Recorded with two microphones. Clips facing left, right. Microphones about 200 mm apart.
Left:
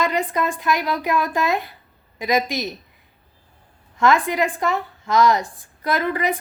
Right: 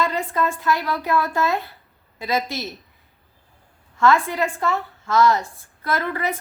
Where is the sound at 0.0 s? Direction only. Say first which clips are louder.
Left 1 dB; 15° left (ahead or behind).